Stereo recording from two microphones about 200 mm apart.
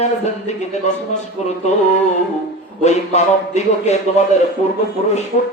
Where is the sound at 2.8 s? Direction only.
35° left (ahead or behind).